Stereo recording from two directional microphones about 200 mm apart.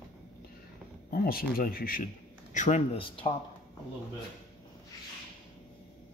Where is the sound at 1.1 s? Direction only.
50° left (ahead or behind).